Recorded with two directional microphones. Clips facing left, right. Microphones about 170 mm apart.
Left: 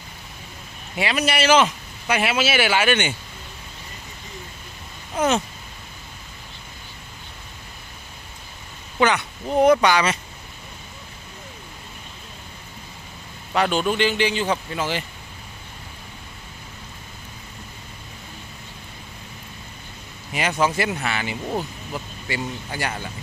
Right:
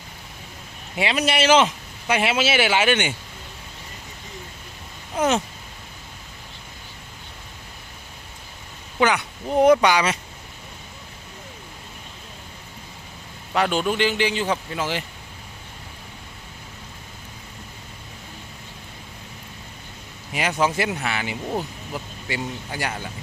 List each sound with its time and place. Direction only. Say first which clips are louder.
0.9 s speech: right 1 dB; 25° right (ahead or behind)
5.1 s a sound: even; 20° right (ahead or behind)
9.0 s speech: left 1 dB; 10° right (ahead or behind)
13.5 s a man's voice: left 1 dB; 5° right (ahead or behind)
20.3 s speech: even; 10° right (ahead or behind)